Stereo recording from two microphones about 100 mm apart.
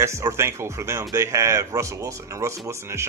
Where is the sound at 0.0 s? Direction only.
30° right (ahead or behind).